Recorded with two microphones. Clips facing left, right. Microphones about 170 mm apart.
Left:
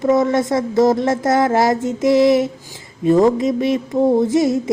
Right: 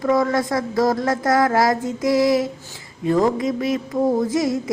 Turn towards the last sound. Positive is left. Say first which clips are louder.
# left 5 dB
turn(degrees=25)  # may be behind; listen again after turning